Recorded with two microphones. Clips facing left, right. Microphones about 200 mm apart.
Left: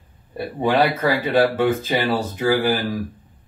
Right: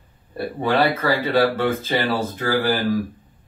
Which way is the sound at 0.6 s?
15° left (ahead or behind).